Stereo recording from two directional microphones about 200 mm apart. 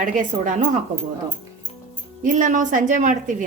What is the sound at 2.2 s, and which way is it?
A woman's voice, 40° right (ahead or behind).